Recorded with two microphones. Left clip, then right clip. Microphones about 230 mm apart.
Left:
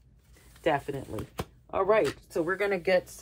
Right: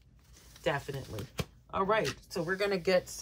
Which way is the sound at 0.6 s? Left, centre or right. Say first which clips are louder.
Left 5 dB; centre.